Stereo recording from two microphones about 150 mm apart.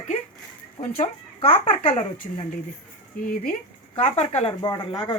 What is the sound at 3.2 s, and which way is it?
Speech, 75° left (ahead or behind).